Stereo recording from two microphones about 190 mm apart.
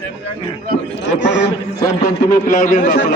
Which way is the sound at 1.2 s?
70° left (ahead or behind).